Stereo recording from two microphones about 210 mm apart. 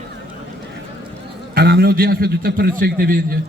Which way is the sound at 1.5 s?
50° right (ahead or behind).